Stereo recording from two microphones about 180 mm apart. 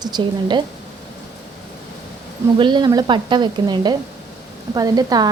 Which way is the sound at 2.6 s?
25° right (ahead or behind).